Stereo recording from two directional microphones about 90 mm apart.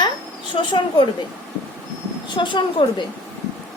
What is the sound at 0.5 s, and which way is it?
Speech, 60° left (ahead or behind).